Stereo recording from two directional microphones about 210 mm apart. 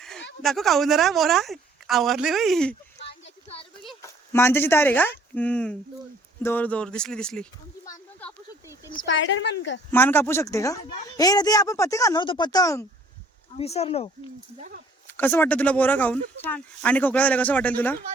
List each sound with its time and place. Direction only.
0.4 s a woman's voice: centre (ahead or behind)
3.2 s a sound: 30° left (ahead or behind)
4.0 s a woman's voice: 10° left (ahead or behind)
7.9 s a sound: 15° left (ahead or behind)
9.9 s speech: 10° left (ahead or behind)
13.6 s speech: 30° left (ahead or behind)
15.0 s speech: 10° left (ahead or behind)